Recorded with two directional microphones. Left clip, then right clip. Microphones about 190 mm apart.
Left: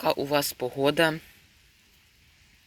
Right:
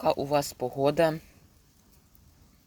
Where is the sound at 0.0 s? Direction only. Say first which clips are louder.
Left 1 dB; centre (ahead or behind).